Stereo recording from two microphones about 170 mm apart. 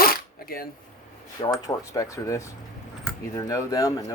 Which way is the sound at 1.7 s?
20° left (ahead or behind).